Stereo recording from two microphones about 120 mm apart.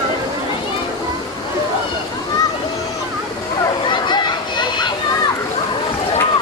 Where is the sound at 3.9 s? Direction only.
40° left (ahead or behind).